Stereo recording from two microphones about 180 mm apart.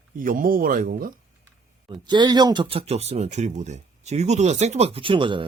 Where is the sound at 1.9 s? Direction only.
25° right (ahead or behind).